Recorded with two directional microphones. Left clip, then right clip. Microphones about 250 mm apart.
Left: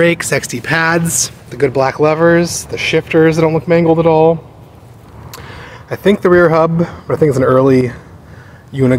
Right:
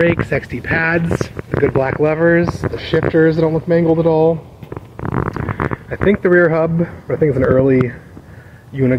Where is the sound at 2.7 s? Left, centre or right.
Centre.